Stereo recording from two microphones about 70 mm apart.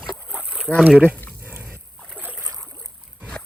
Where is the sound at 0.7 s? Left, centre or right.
Centre.